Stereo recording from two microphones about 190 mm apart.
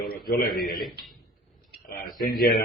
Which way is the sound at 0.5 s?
Centre (ahead or behind).